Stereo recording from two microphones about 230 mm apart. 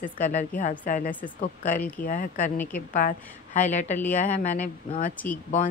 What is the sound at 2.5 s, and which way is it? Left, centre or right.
Speech, centre.